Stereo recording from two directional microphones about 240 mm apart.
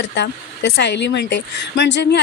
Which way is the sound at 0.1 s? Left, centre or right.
Left.